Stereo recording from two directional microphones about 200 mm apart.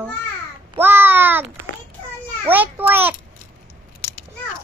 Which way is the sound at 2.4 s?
10° right (ahead or behind).